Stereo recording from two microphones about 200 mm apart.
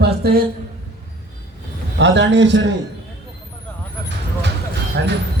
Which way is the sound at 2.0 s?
60° right (ahead or behind).